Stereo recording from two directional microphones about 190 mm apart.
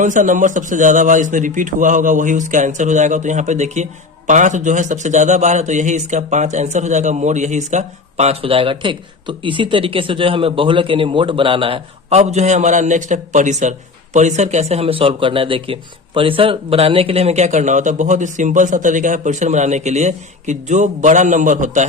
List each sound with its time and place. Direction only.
0.0 s a man's voice: 40° right (ahead or behind)